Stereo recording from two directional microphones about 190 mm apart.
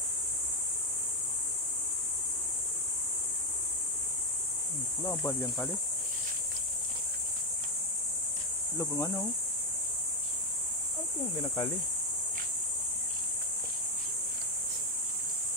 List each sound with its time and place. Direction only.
5.0 s speech: 15° left (ahead or behind)
8.7 s speech: 15° left (ahead or behind)
11.4 s speech: 20° left (ahead or behind)